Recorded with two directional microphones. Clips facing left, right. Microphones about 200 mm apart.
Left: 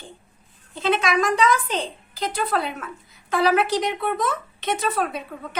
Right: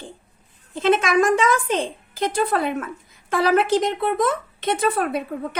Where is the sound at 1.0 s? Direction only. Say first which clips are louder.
Right 3 dB; 50° right (ahead or behind).